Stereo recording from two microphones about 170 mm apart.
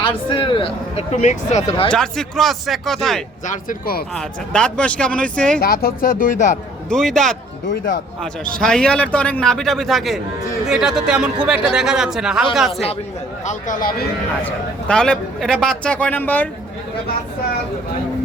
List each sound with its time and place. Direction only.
0.0 s speech: 30° left (ahead or behind)
1.1 s speech: 45° left (ahead or behind)
1.9 s a man's voice: 5° left (ahead or behind)
3.4 s speech: 50° left (ahead or behind)
4.1 s a man's voice: 5° left (ahead or behind)
5.5 s speech: 65° left (ahead or behind)
6.9 s a man's voice: centre (ahead or behind)
8.6 s a man's voice: 5° left (ahead or behind)
13.4 s speech: 45° left (ahead or behind)
14.4 s a man's voice: 5° left (ahead or behind)